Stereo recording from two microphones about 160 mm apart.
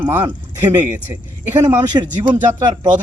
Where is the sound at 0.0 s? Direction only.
15° right (ahead or behind).